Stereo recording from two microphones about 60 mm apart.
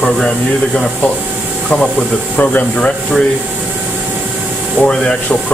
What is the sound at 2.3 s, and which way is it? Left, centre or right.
Speech, left.